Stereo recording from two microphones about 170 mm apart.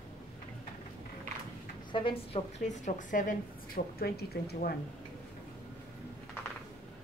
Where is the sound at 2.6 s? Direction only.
45° left (ahead or behind); by 4.7 s 70° left (ahead or behind).